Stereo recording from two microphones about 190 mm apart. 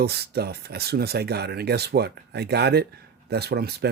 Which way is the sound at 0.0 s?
60° right (ahead or behind).